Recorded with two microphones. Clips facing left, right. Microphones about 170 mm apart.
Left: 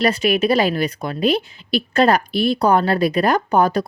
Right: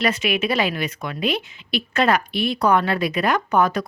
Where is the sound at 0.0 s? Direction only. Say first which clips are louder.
Left 5 dB; 35° left (ahead or behind).